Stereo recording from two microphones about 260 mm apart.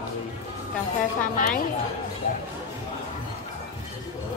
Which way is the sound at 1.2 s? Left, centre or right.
Left.